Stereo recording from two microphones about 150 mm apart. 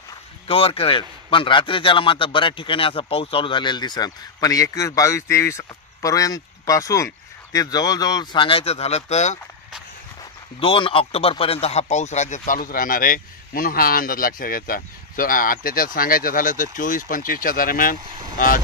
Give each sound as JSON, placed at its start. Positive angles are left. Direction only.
{"t": 0.5, "sound": "a man's voice", "side_deg": 40}
{"t": 10.6, "sound": "speech", "side_deg": 35}